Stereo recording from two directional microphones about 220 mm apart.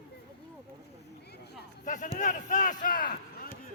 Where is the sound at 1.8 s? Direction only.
35° left (ahead or behind).